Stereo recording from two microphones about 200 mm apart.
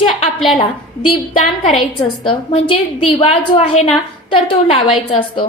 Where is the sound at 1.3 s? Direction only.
30° left (ahead or behind).